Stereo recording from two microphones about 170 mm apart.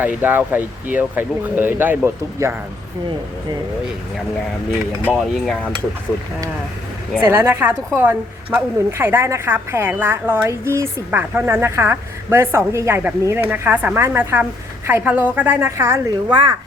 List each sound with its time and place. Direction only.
0.0 s a woman's voice: 10° right (ahead or behind)
4.9 s a woman's voice: 10° right (ahead or behind)
7.2 s a woman's voice: 15° right (ahead or behind)
16.3 s speech: 25° right (ahead or behind)